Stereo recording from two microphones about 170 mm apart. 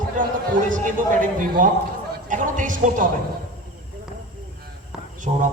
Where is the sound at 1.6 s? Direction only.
50° right (ahead or behind).